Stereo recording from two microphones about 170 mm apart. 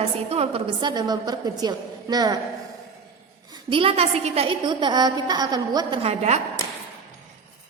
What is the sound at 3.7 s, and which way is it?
A woman's voice, 35° right (ahead or behind).